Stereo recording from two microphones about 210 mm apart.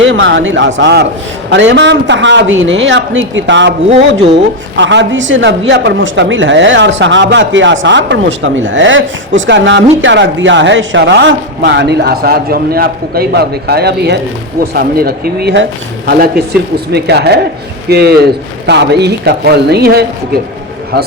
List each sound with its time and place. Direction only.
0.0 s a woman's voice: 60° right (ahead or behind)
4.8 s a woman's voice: 60° right (ahead or behind)